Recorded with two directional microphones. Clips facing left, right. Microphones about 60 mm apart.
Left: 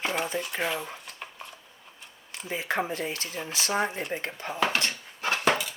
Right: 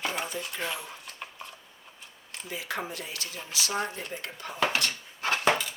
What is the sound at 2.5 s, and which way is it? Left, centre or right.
Speech, left.